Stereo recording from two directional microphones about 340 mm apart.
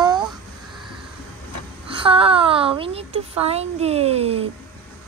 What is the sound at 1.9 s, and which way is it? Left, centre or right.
A woman's voice, centre.